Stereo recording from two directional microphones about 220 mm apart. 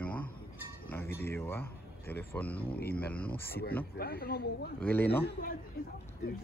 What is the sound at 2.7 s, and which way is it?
Speech, 45° left (ahead or behind).